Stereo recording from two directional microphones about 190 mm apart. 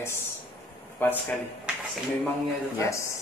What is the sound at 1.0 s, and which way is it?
Speech, 10° left (ahead or behind).